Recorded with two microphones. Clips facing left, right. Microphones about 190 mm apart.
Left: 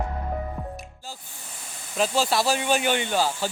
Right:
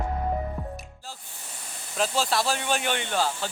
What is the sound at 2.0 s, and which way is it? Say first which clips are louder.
Speech: left 3 dB; centre (ahead or behind).